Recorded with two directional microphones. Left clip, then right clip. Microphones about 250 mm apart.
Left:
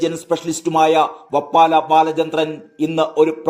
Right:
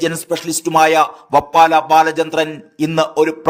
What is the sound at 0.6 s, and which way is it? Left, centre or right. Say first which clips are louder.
A man's voice: right 3 dB; right.